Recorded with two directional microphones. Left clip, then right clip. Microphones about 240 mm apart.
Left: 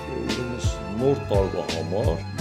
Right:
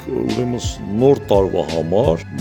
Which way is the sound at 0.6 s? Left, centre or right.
Right.